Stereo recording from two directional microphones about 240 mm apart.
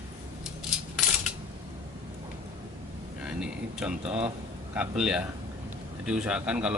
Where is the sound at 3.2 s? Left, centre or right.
Centre.